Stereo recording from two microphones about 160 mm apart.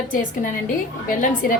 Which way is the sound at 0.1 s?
55° left (ahead or behind).